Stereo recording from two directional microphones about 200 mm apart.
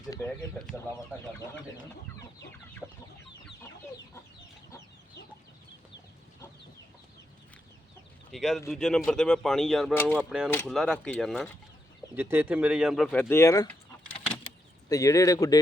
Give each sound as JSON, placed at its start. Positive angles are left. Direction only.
{"t": 2.8, "sound": "speech", "side_deg": -5}
{"t": 8.3, "sound": "speech", "side_deg": 0}
{"t": 12.1, "sound": "speech", "side_deg": -10}
{"t": 14.8, "sound": "speech", "side_deg": 15}